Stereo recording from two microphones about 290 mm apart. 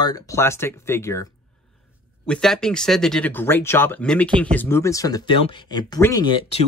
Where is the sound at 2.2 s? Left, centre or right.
Centre.